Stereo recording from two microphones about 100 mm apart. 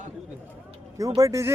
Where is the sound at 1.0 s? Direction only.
35° right (ahead or behind).